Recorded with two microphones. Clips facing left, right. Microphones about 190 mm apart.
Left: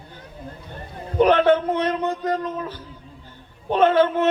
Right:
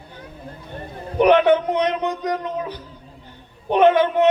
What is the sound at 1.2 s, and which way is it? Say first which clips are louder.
A man's voice: right 2 dB; 15° right (ahead or behind).